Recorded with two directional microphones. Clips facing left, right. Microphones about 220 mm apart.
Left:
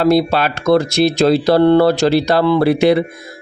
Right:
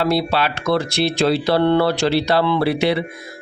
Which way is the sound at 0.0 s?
45° left (ahead or behind).